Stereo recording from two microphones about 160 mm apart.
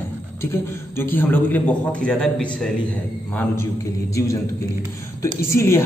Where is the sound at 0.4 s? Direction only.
15° left (ahead or behind).